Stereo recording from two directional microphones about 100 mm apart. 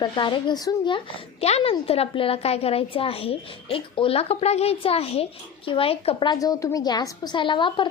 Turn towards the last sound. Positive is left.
turn(degrees=55)  # may be behind; listen again after turning